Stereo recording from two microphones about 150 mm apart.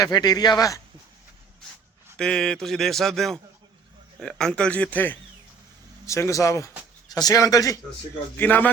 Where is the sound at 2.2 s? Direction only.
5° left (ahead or behind); by 7.8 s 25° left (ahead or behind).